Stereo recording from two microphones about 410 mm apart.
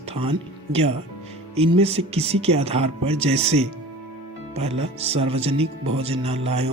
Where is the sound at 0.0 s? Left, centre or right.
Centre.